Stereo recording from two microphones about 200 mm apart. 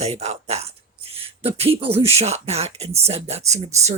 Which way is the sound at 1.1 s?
30° right (ahead or behind).